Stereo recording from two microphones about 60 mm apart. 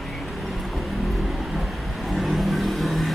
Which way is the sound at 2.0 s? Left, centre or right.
Centre.